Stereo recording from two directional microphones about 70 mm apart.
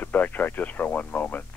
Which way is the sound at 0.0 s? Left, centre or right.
Left.